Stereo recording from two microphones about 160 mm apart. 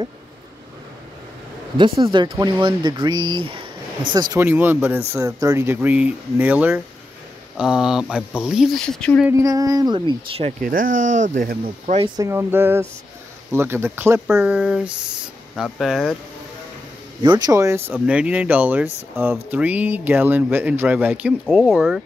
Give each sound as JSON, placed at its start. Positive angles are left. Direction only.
{"t": 1.8, "sound": "speech", "side_deg": -30}
{"t": 4.4, "sound": "speech", "side_deg": -10}
{"t": 9.3, "sound": "speech", "side_deg": -20}
{"t": 10.6, "sound": "speech", "side_deg": -60}
{"t": 12.2, "sound": "speech", "side_deg": -15}
{"t": 17.2, "sound": "speech", "side_deg": -25}